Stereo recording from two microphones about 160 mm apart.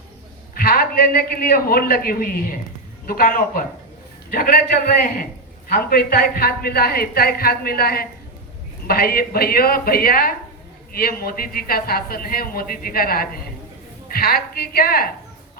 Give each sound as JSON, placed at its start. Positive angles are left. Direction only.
{"t": 0.5, "sound": "a man's voice", "side_deg": 65}